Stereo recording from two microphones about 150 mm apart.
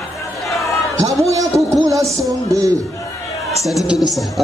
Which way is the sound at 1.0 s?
20° right (ahead or behind).